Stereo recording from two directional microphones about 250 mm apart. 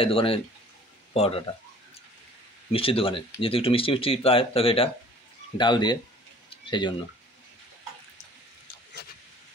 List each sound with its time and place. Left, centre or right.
0.0 s speech: left
2.7 s speech: left
6.5 s a sound: centre